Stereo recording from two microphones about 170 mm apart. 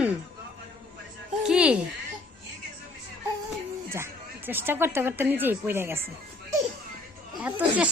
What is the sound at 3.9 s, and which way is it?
Speech, 15° right (ahead or behind).